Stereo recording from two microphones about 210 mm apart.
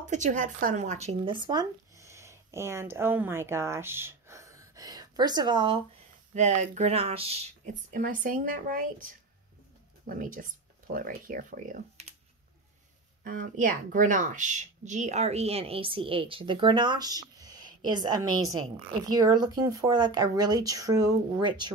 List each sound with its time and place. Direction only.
0.1 s speech: 35° right (ahead or behind)
6.3 s speech: 35° right (ahead or behind)
13.2 s speech: 40° right (ahead or behind); by 21.7 s 20° right (ahead or behind)